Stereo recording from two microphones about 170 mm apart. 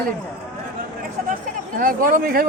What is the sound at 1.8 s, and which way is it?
Speech, 55° right (ahead or behind).